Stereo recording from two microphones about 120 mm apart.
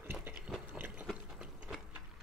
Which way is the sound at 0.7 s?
15° right (ahead or behind).